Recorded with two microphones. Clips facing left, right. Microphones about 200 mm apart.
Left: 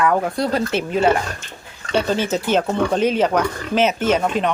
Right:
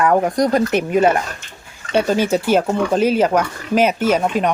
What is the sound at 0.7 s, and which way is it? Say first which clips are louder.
Speech: right 4 dB; 15° right (ahead or behind).